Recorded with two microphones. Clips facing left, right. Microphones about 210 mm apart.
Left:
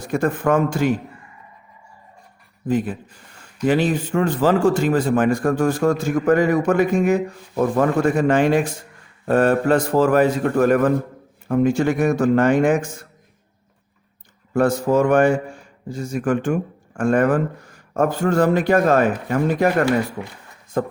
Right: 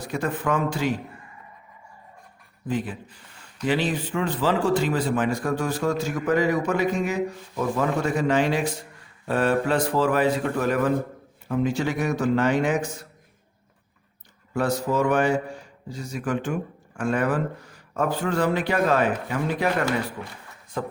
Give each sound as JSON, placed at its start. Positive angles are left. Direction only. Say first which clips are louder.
{"t": 0.0, "sound": "speech", "louder": "left 6 dB", "side_deg": 50}
{"t": 2.6, "sound": "speech", "louder": "left 6 dB", "side_deg": 45}
{"t": 14.5, "sound": "speech", "louder": "left 7 dB", "side_deg": 50}